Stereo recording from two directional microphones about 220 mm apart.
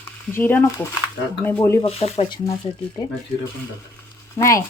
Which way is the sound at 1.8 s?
25° left (ahead or behind).